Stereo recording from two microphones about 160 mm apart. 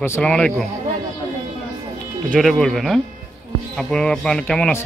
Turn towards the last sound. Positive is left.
turn(degrees=5)  # may be behind; listen again after turning